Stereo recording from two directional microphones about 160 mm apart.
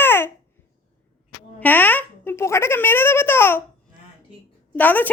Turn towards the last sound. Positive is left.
turn(degrees=10)  # may be behind; listen again after turning